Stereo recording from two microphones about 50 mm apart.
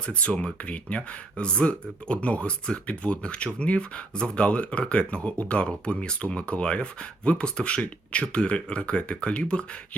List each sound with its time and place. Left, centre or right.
0.0 s speech: left